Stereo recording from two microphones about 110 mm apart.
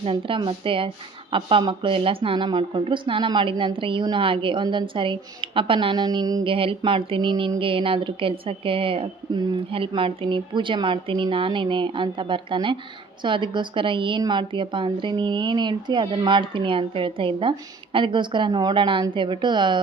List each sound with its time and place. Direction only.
0.0 s speech: 55° right (ahead or behind); by 6.4 s 35° right (ahead or behind)
6.4 s speech: 55° right (ahead or behind)